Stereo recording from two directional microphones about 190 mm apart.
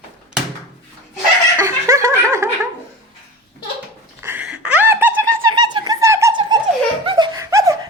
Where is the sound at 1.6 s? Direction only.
15° right (ahead or behind).